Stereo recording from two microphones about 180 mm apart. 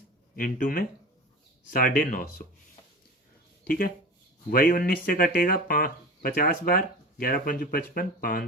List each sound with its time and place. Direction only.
0.3 s speech: 50° left (ahead or behind)
3.6 s speech: 50° left (ahead or behind)